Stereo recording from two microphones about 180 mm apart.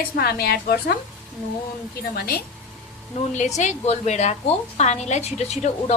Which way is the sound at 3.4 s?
40° left (ahead or behind).